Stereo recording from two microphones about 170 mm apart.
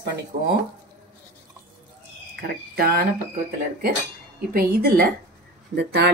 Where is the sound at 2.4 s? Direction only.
65° right (ahead or behind).